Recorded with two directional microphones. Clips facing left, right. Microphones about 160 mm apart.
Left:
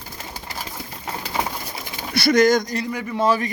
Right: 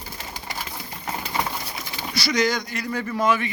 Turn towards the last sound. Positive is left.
turn(degrees=35)  # may be behind; listen again after turning